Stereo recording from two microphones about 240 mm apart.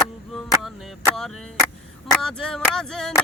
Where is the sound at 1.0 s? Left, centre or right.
Centre.